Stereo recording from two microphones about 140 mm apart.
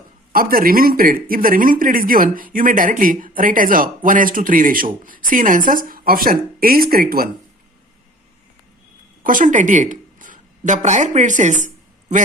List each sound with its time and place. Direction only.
0.3 s speech: 90° right
9.2 s a woman's voice: 70° right (ahead or behind)